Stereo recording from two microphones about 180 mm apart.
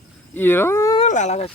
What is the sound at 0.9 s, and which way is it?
Speech, 40° left (ahead or behind).